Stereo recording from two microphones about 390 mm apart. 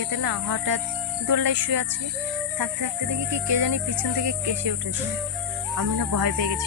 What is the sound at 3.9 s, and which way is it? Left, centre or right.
Music, right.